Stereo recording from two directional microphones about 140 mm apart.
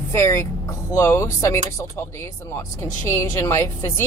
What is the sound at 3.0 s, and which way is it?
Speech, 20° left (ahead or behind).